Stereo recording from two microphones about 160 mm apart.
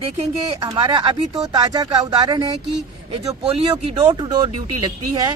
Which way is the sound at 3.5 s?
40° right (ahead or behind).